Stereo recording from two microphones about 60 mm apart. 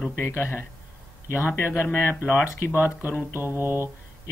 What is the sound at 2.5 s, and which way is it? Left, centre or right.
Speech, left.